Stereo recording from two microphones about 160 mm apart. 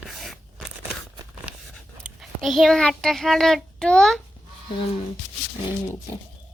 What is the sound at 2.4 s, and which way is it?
Child singing, centre (ahead or behind).